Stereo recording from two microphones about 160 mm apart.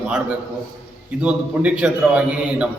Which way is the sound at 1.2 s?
5° right (ahead or behind).